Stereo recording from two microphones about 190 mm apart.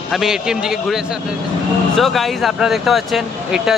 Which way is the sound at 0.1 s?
Centre (ahead or behind).